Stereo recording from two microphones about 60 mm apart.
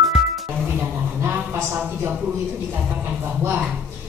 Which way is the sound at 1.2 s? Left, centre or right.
Right.